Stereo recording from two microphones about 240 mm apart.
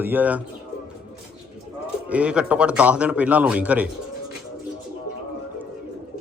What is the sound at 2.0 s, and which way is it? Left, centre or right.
A man's voice, centre.